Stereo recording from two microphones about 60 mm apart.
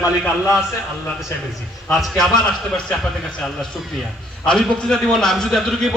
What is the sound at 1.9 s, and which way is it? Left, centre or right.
Speech, centre.